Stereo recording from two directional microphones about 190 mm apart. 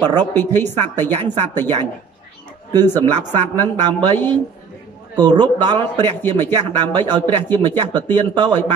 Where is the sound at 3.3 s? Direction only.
10° left (ahead or behind).